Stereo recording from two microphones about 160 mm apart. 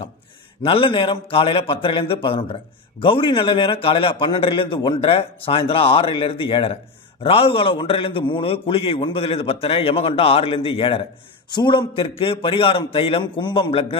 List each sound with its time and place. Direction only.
0.6 s a man's voice: 35° left (ahead or behind)